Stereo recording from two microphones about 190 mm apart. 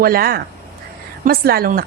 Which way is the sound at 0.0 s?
50° right (ahead or behind).